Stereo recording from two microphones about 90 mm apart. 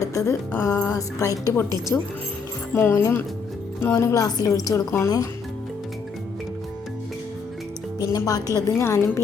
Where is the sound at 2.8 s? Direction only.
30° left (ahead or behind).